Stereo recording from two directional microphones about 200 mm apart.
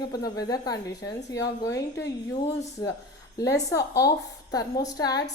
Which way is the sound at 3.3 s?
15° left (ahead or behind).